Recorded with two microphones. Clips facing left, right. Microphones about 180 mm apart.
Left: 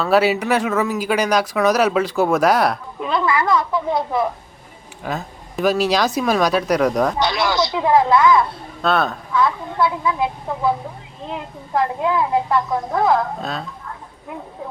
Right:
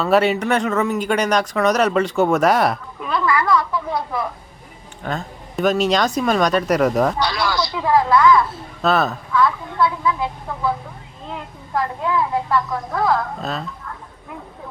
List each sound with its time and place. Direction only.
0.0 s speech: centre (ahead or behind)
3.0 s speech: 20° left (ahead or behind)
5.0 s speech: centre (ahead or behind)
7.2 s speech: 20° left (ahead or behind)
8.8 s speech: centre (ahead or behind)
9.3 s speech: 20° left (ahead or behind)
11.3 s speech: 25° left (ahead or behind)
13.4 s speech: centre (ahead or behind)